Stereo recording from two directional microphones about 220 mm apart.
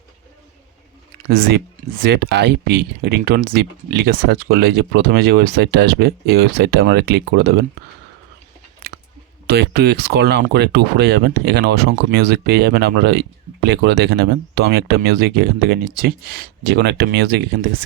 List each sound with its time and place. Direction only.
2.0 s speech: 50° right (ahead or behind)
9.5 s speech: 45° right (ahead or behind)